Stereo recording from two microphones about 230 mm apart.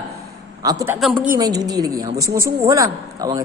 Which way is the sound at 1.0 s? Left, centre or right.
Centre.